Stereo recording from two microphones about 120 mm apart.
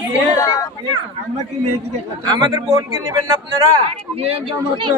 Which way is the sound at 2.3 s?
30° right (ahead or behind).